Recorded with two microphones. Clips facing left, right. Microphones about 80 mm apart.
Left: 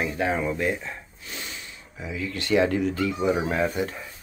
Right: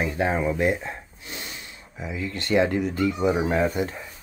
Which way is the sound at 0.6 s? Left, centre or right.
Right.